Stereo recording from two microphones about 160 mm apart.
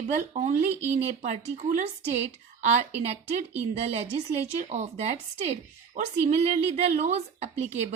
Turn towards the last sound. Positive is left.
turn(degrees=-45)  # may be behind; listen again after turning